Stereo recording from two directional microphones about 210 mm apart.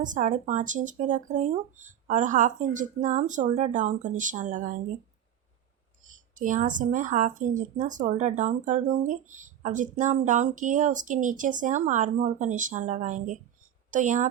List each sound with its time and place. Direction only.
0.0 s speech: 35° right (ahead or behind)
6.1 s speech: 40° right (ahead or behind)